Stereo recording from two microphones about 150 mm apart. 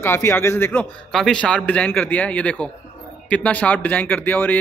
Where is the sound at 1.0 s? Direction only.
5° left (ahead or behind).